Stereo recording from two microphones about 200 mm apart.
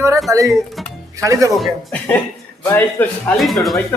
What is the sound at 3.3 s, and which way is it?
Speech, centre (ahead or behind).